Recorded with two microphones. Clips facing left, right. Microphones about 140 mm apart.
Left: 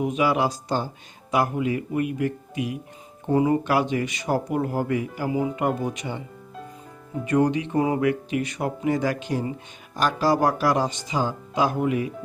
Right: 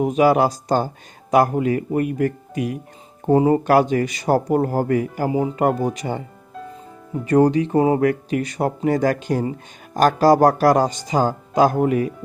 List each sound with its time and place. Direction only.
0.0 s speech: 40° right (ahead or behind)
5.3 s speech: 35° right (ahead or behind)
7.3 s speech: 35° right (ahead or behind)